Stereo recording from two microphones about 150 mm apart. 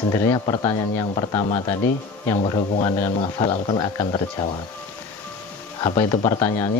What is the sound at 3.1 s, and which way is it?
Speech, 30° left (ahead or behind).